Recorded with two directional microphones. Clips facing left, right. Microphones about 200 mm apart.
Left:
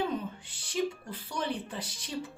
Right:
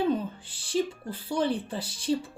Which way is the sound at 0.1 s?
30° right (ahead or behind).